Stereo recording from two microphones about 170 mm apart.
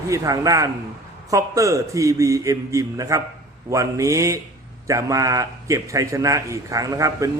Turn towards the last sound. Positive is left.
turn(degrees=-20)  # may be behind; listen again after turning